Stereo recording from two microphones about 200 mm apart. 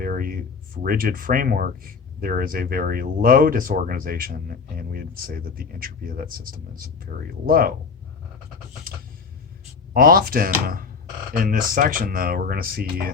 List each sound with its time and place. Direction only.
0.0 s speech: 45° right (ahead or behind)
9.9 s speech: 45° right (ahead or behind)